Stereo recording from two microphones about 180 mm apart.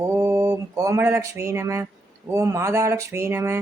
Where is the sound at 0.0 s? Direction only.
15° right (ahead or behind).